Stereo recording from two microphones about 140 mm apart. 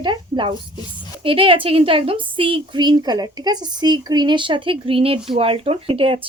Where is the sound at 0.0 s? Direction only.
35° right (ahead or behind).